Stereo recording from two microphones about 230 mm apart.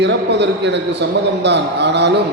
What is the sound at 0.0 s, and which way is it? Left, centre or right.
A man's voice, right.